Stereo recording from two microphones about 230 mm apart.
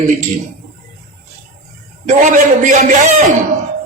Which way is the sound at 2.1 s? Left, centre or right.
Right.